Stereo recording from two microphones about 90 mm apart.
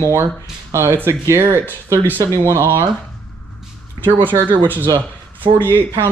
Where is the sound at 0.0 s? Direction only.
30° right (ahead or behind).